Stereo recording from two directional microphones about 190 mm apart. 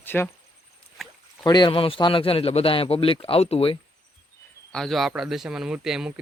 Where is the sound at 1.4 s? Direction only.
25° left (ahead or behind).